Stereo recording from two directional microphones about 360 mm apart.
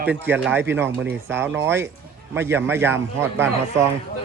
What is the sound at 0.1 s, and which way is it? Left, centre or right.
A man's voice, centre.